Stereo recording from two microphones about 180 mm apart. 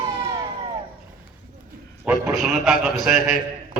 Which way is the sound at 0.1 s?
25° right (ahead or behind).